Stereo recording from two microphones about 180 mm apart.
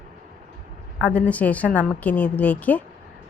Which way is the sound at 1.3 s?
10° left (ahead or behind).